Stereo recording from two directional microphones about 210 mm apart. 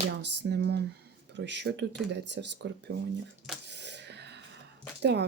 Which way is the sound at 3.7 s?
55° right (ahead or behind).